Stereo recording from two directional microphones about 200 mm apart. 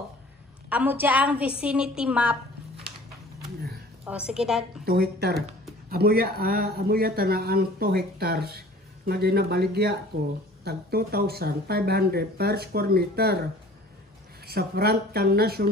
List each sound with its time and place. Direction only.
0.7 s a woman's voice: 10° right (ahead or behind)
4.0 s a woman's voice: 5° right (ahead or behind)
4.8 s speech: 50° right (ahead or behind)
14.4 s speech: 50° right (ahead or behind)